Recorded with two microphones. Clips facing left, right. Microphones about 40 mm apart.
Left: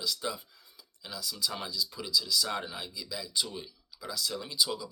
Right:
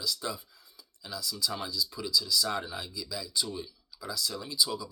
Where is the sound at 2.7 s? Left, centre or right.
Left.